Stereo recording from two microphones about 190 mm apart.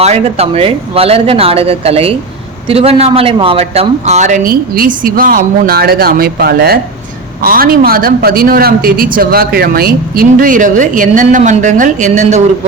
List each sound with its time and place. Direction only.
0.0 s a woman's voice: 35° right (ahead or behind)